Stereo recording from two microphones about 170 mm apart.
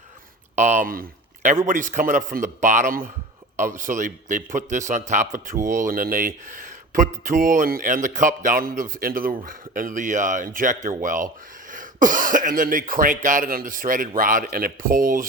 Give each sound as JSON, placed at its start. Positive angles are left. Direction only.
{"t": 0.5, "sound": "speech", "side_deg": -45}